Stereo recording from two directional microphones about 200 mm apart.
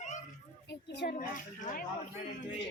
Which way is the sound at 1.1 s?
40° left (ahead or behind).